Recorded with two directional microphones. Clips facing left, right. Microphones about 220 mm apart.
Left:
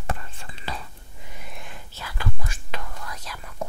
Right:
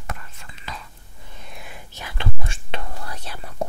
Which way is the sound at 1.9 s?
20° right (ahead or behind).